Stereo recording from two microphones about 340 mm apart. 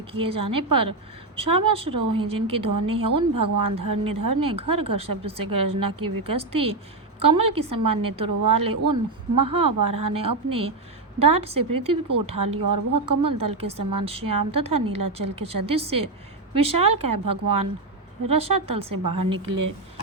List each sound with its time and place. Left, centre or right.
0.1 s a woman's voice: centre
0.3 s a woman's voice: right